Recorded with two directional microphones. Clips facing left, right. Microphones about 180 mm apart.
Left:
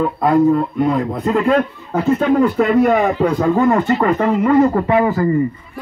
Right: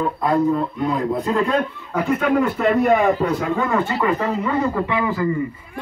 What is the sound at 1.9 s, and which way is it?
Speech, 35° left (ahead or behind).